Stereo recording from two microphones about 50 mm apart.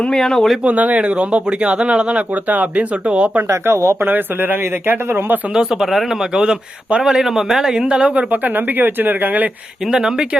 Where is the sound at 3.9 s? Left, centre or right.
Right.